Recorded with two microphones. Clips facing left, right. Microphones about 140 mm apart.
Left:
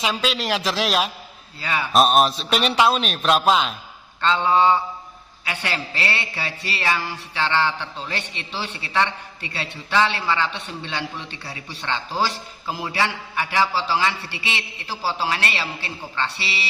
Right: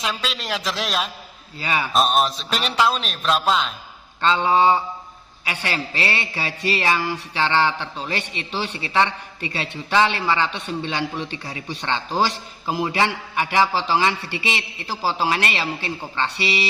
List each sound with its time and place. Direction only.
0.0 s a man's voice: 5° left (ahead or behind)
1.5 s a man's voice: 10° right (ahead or behind)
1.9 s a man's voice: 5° left (ahead or behind)
4.2 s a man's voice: 10° right (ahead or behind)